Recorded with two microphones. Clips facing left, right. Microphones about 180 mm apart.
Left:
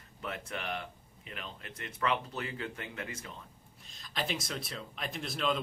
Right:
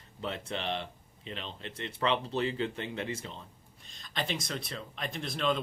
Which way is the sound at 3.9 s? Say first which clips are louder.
Right 1 dB; 5° left (ahead or behind).